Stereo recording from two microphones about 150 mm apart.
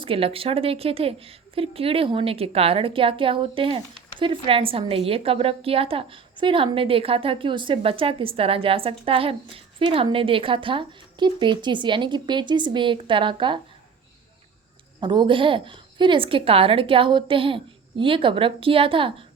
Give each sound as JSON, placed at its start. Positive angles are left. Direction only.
{"t": 0.0, "sound": "a woman's voice", "side_deg": -40}
{"t": 15.0, "sound": "a woman's voice", "side_deg": -30}